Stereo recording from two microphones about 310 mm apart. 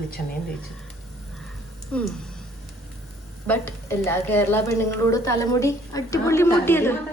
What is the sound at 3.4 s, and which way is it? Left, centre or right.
A woman's voice, centre.